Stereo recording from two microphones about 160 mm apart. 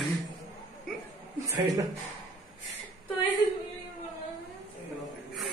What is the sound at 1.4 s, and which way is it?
Speech, 20° right (ahead or behind).